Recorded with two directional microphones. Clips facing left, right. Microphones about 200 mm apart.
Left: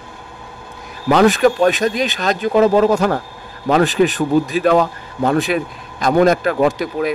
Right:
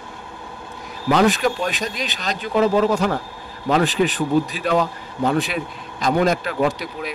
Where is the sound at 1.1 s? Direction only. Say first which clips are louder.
Left 5 dB; 50° left (ahead or behind).